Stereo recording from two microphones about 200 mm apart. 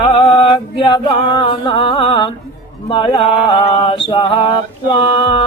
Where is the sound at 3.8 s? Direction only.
25° left (ahead or behind).